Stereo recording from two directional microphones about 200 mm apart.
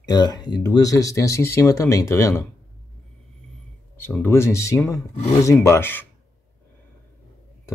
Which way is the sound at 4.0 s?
10° left (ahead or behind).